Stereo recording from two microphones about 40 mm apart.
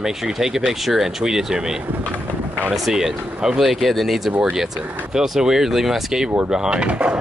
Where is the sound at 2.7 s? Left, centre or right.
Centre; by 7.2 s right.